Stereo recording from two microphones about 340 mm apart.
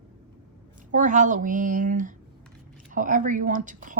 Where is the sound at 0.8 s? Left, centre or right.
Right.